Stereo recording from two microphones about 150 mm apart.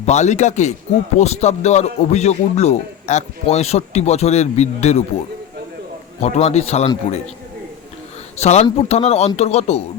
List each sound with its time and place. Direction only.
0.0 s speech: 50° left (ahead or behind)
6.2 s speech: 45° left (ahead or behind)
8.4 s speech: 45° left (ahead or behind)